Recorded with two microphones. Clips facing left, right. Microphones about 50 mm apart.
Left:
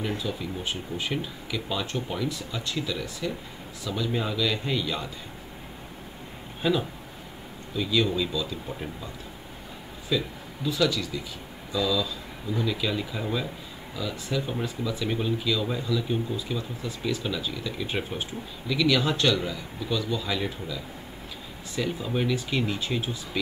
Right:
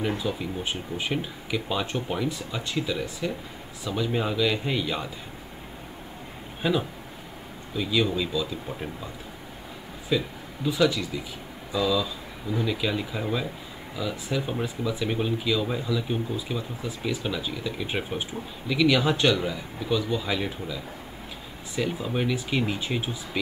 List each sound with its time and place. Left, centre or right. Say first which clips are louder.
0.1 s speech: right 2 dB; right
6.6 s speech: even; centre
10.0 s speech: right 1 dB; right